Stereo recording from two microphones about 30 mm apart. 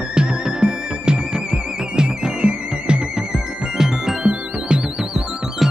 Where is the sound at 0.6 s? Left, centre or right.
Right.